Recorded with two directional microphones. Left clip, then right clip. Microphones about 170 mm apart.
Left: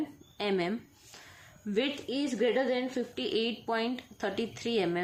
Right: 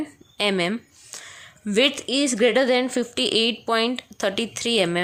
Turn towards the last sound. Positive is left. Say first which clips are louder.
# right 9 dB
turn(degrees=-35)  # may be behind; listen again after turning